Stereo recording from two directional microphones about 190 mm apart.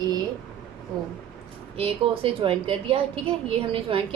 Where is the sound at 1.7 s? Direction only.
30° right (ahead or behind).